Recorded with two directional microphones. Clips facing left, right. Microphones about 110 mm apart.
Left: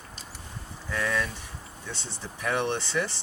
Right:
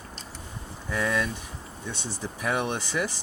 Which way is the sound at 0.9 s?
20° right (ahead or behind).